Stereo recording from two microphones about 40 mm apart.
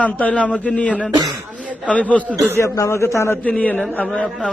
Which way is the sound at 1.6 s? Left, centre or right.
Right.